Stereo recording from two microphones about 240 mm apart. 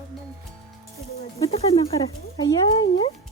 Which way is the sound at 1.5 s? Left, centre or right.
Left.